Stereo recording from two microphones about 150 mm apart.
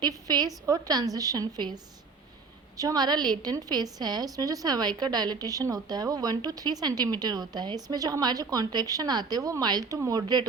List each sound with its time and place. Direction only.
0.0 s a woman's voice: 25° right (ahead or behind)